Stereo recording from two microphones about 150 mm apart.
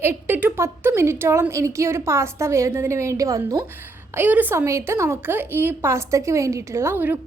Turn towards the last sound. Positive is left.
turn(degrees=-15)  # may be behind; listen again after turning